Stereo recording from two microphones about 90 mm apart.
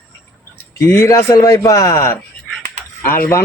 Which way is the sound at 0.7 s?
30° left (ahead or behind).